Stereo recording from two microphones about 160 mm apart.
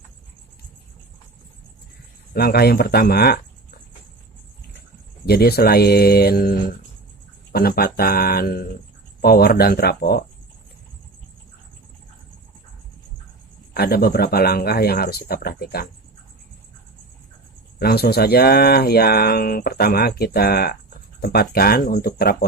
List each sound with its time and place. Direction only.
2.3 s speech: 75° left (ahead or behind)
5.2 s speech: 80° left
13.7 s speech: 75° left (ahead or behind)
17.7 s speech: 75° left (ahead or behind)